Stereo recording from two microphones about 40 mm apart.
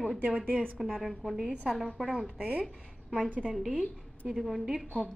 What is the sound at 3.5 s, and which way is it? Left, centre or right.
A woman's voice, centre.